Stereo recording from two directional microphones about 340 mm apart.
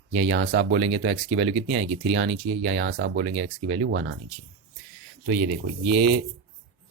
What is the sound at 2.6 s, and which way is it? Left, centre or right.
Speech, right.